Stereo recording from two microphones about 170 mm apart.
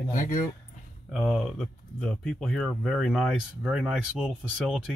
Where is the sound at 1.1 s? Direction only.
5° left (ahead or behind).